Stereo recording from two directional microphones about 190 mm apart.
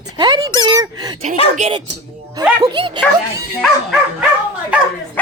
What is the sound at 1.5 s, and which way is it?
Speech, 35° right (ahead or behind).